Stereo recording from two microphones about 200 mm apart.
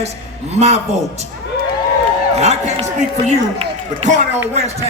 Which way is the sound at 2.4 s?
35° right (ahead or behind).